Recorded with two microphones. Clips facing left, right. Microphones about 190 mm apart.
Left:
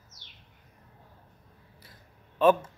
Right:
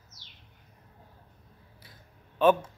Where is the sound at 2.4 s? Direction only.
5° right (ahead or behind).